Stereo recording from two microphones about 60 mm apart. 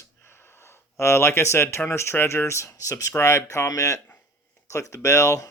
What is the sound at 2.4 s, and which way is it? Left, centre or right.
Speech, left.